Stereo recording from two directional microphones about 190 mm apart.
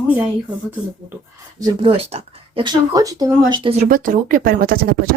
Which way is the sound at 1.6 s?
20° right (ahead or behind).